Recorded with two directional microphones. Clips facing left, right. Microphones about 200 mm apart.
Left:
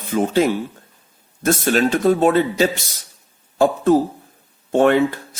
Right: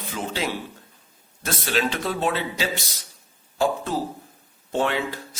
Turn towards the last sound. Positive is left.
turn(degrees=55)  # may be behind; listen again after turning